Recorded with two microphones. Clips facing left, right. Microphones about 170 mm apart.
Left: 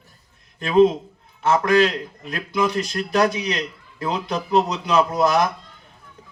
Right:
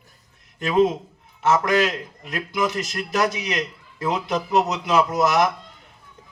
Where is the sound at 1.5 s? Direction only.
30° left (ahead or behind).